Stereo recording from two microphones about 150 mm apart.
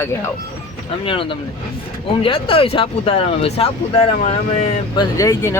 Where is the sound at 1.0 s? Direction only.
35° left (ahead or behind).